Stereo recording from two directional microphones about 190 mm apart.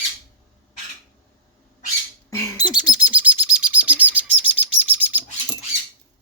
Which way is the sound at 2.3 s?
20° left (ahead or behind).